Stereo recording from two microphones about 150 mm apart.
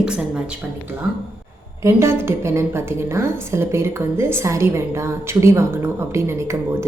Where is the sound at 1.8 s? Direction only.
15° right (ahead or behind).